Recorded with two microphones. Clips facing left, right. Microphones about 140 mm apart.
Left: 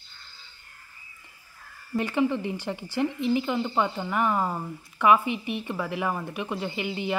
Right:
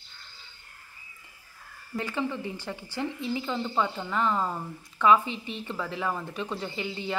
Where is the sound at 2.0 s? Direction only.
15° left (ahead or behind).